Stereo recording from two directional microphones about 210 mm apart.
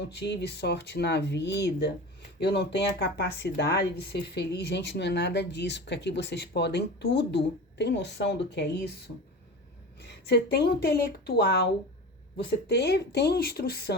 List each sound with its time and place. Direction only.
0.2 s speech: 55° left (ahead or behind)
10.0 s speech: 50° left (ahead or behind)